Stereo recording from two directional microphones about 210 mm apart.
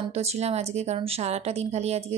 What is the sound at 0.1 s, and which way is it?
Speech, 30° right (ahead or behind).